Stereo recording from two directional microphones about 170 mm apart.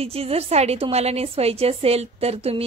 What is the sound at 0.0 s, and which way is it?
A woman's voice, 35° right (ahead or behind).